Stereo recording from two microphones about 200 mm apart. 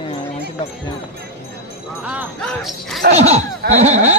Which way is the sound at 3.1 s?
35° right (ahead or behind).